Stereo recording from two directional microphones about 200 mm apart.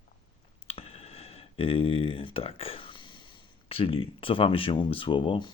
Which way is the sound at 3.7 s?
30° left (ahead or behind).